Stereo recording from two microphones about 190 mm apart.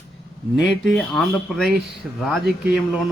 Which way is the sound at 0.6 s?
Centre (ahead or behind).